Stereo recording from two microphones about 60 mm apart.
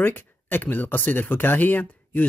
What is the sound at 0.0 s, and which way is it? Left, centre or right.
Speech, left.